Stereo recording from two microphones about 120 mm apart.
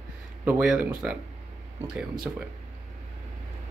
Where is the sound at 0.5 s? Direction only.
10° right (ahead or behind).